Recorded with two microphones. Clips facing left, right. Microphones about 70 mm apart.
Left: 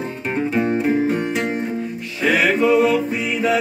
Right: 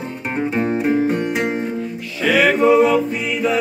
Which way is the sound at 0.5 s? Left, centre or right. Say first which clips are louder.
Right 1 dB; centre.